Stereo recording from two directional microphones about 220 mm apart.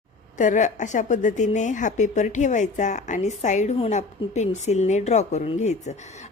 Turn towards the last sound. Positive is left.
turn(degrees=30)  # may be behind; listen again after turning